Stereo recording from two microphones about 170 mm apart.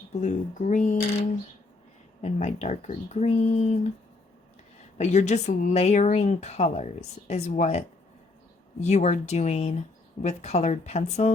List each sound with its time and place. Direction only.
0.1 s speech: 45° left (ahead or behind)
4.9 s speech: 40° left (ahead or behind)